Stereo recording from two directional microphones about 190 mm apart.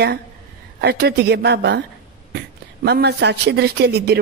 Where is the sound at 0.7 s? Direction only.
55° right (ahead or behind).